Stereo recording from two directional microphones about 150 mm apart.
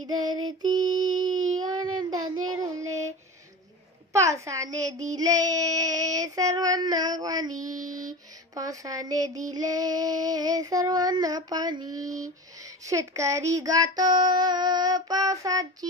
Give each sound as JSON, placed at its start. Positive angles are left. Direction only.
{"t": 0.0, "sound": "female singing", "side_deg": -30}
{"t": 4.1, "sound": "a woman's voice", "side_deg": -20}
{"t": 5.0, "sound": "child singing", "side_deg": -25}
{"t": 8.5, "sound": "child singing", "side_deg": -20}